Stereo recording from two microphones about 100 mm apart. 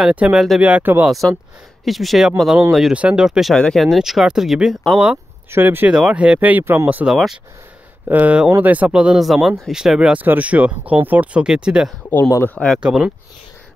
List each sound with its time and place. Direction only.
0.1 s speech: 15° right (ahead or behind)
1.0 s speech: centre (ahead or behind)
5.5 s speech: 20° right (ahead or behind)
5.9 s speech: 10° right (ahead or behind)
7.1 s speech: 5° right (ahead or behind)
8.1 s speech: 15° right (ahead or behind)
12.1 s speech: 25° left (ahead or behind)
12.5 s speech: 5° left (ahead or behind)
12.8 s speech: 10° right (ahead or behind)